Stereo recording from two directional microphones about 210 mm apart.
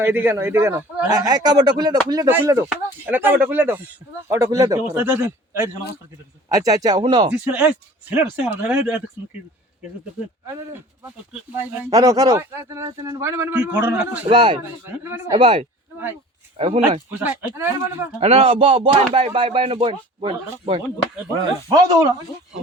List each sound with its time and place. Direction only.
0.0 s a man's voice: 10° right (ahead or behind)
7.3 s a man's voice: 5° right (ahead or behind)
10.4 s a man's voice: 10° right (ahead or behind)
14.3 s speech: 25° right (ahead or behind)
14.6 s a man's voice: 10° right (ahead or behind)
15.3 s speech: 25° right (ahead or behind)
17.1 s a man's voice: 10° right (ahead or behind)
18.2 s a man's voice: 30° right (ahead or behind)